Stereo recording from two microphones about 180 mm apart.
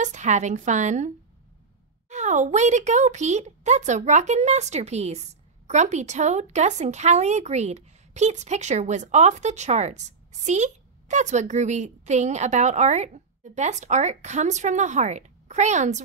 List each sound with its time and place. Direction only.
0.0 s a woman's voice: 40° right (ahead or behind)